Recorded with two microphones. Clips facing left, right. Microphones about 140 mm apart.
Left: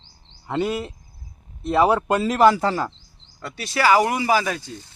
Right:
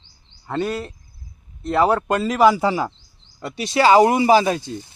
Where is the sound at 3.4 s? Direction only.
20° right (ahead or behind).